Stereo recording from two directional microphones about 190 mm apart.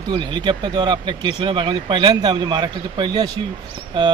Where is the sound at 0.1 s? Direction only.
25° right (ahead or behind).